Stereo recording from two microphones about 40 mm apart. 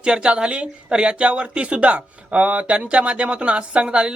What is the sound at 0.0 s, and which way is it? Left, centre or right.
Speech, right.